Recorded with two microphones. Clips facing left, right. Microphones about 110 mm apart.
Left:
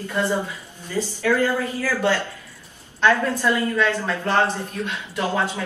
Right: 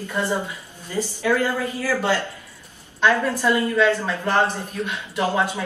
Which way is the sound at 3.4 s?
15° right (ahead or behind).